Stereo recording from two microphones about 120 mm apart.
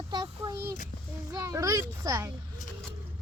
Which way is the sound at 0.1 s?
35° right (ahead or behind).